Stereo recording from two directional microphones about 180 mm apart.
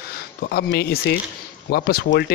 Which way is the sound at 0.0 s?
60° left (ahead or behind).